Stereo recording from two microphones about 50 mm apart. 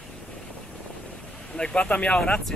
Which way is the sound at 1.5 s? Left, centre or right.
Centre.